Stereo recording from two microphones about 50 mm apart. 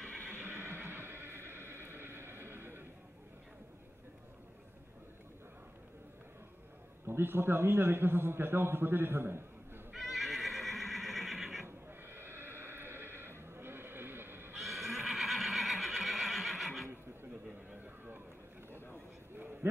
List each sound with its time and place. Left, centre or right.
0.4 s neigh: right
7.1 s a man's voice: right
9.9 s neigh: centre
11.6 s neigh: right
13.5 s vehicle: right
14.6 s neigh: centre
19.3 s a sound: right